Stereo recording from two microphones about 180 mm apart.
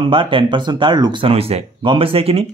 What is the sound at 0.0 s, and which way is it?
A man's voice, 30° right (ahead or behind).